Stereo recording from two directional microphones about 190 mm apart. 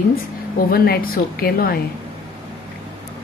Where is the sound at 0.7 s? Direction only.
50° left (ahead or behind).